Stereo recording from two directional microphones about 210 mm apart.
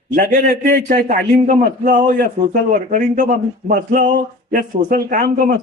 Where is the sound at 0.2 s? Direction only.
40° right (ahead or behind).